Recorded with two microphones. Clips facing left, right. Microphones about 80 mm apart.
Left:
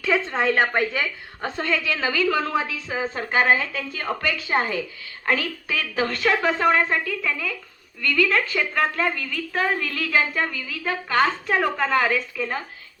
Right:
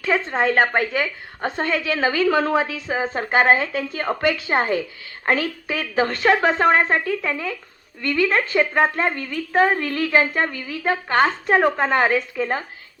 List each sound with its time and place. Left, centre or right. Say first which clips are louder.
0.0 s a woman's voice: right 2 dB; right